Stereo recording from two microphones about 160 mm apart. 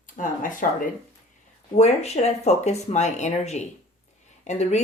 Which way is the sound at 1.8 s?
40° left (ahead or behind).